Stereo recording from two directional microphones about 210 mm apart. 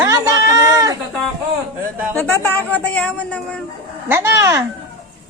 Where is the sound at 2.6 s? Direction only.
5° left (ahead or behind).